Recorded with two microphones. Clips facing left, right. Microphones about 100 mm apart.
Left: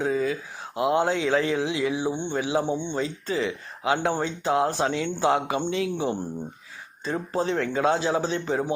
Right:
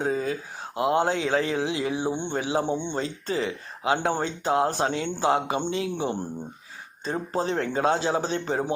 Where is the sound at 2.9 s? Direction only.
35° right (ahead or behind).